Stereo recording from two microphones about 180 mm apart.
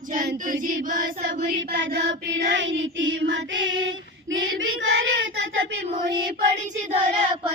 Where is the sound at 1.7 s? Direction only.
80° right.